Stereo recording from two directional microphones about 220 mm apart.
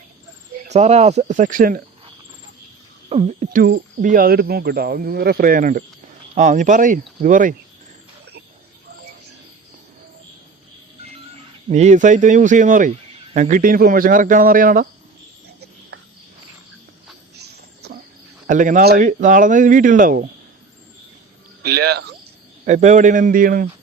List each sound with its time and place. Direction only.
0.7 s speech: 30° right (ahead or behind)
3.1 s speech: 30° right (ahead or behind)
11.7 s speech: 30° right (ahead or behind)
17.3 s a sound: 45° right (ahead or behind)
18.4 s speech: 35° right (ahead or behind)
21.6 s speech: 45° right (ahead or behind)
22.6 s speech: 35° right (ahead or behind)